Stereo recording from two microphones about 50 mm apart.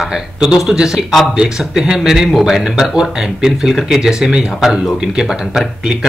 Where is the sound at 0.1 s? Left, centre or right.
Centre.